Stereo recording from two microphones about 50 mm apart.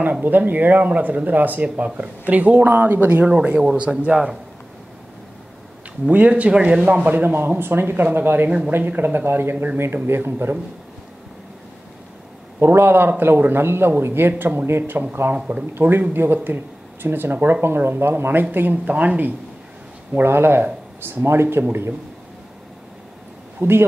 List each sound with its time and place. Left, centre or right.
0.0 s speech: right
4.0 s speech: centre
6.1 s speech: right
7.1 s speech: right
8.5 s speech: right
8.7 s speech: right
12.5 s speech: right
15.3 s speech: right
15.8 s speech: right
20.2 s speech: right
23.6 s speech: right